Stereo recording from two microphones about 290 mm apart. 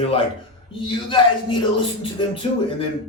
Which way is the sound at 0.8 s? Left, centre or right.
Centre.